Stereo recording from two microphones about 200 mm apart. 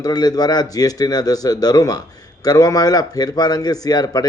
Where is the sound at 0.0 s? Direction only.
20° left (ahead or behind).